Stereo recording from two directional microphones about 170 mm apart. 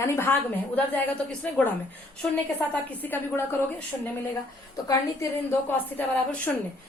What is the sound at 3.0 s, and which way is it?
Speech, 10° left (ahead or behind).